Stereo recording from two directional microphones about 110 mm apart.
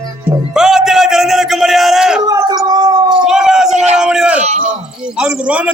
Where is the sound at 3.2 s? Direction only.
5° right (ahead or behind).